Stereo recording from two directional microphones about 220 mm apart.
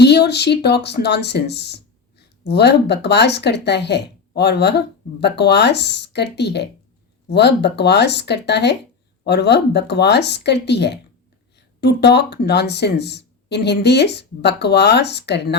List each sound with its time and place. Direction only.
0.0 s speech: 50° left (ahead or behind)